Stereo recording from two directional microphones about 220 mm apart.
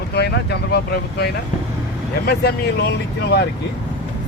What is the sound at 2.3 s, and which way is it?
Speech, 45° left (ahead or behind).